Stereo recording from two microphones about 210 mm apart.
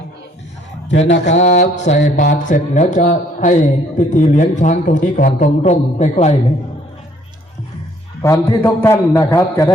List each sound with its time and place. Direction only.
0.9 s a man's voice: 60° left (ahead or behind)
1.7 s speech: 35° left (ahead or behind)
8.2 s a man's voice: 15° left (ahead or behind)